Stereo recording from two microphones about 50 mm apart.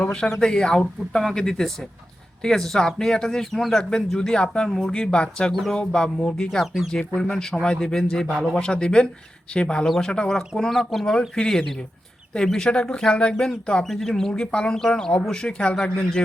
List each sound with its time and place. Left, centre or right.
0.0 s a sound: centre
0.3 s speech: centre
13.8 s speech: centre